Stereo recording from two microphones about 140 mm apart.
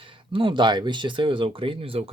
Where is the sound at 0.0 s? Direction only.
40° right (ahead or behind).